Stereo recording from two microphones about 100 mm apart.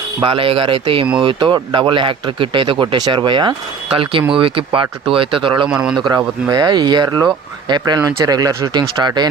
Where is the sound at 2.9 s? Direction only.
45° right (ahead or behind); by 5.5 s 60° right (ahead or behind).